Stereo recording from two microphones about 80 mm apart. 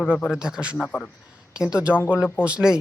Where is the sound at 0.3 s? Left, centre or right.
Centre.